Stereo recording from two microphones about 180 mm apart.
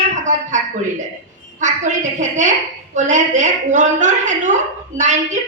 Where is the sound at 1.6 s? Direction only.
45° right (ahead or behind).